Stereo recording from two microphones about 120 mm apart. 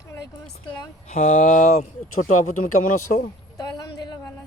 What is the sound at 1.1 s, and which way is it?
Speech, 90° left.